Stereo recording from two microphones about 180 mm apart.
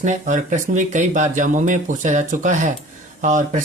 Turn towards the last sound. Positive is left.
turn(degrees=-45)  # may be behind; listen again after turning